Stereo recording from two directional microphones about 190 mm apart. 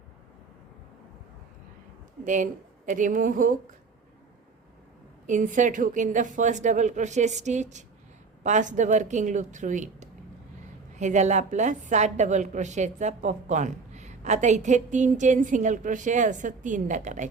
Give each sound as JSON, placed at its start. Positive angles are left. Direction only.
{"t": 2.2, "sound": "a woman's voice", "side_deg": -40}
{"t": 5.2, "sound": "a woman's voice", "side_deg": -40}